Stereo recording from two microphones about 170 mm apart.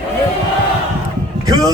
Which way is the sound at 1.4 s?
20° right (ahead or behind).